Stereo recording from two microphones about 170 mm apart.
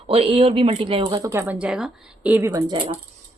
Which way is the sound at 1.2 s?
15° right (ahead or behind).